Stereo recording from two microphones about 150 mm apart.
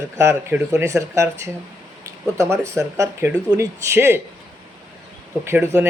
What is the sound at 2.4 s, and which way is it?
Speech, 20° right (ahead or behind).